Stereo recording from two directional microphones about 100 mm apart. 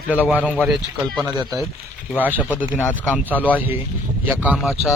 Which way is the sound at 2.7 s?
15° left (ahead or behind).